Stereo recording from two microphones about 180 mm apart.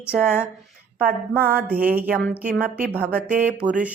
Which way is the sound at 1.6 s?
10° right (ahead or behind).